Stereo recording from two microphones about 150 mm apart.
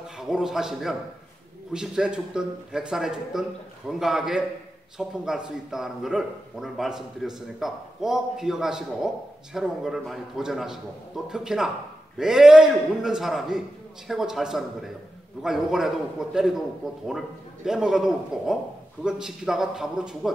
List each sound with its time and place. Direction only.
0.2 s a man's voice: 5° right (ahead or behind)
17.6 s a man's voice: 5° right (ahead or behind)